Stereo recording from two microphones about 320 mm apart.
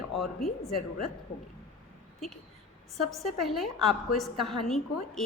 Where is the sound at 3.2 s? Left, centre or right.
Centre.